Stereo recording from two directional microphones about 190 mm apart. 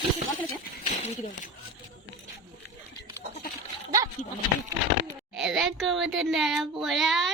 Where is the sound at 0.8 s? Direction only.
40° left (ahead or behind).